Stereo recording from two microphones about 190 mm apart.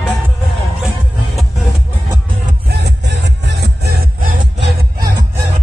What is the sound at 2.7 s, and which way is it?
Music, 65° right (ahead or behind).